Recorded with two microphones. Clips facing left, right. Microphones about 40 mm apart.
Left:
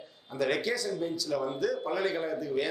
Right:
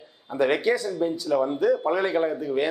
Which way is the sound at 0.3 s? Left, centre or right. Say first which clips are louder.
Right 7 dB; right.